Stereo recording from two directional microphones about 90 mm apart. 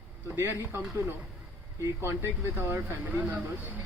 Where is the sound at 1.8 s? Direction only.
30° right (ahead or behind).